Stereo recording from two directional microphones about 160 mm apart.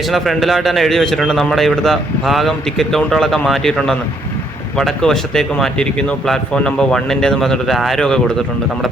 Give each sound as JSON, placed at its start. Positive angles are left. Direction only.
{"t": 0.1, "sound": "speech", "side_deg": 0}